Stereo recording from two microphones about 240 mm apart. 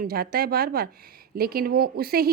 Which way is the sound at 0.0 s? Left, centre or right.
Right.